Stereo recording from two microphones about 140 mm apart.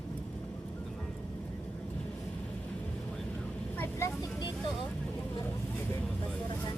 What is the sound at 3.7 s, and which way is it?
Vehicle, 15° left (ahead or behind).